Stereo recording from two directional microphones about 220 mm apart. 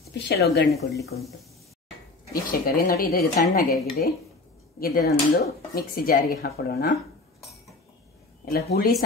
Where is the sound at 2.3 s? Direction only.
40° left (ahead or behind).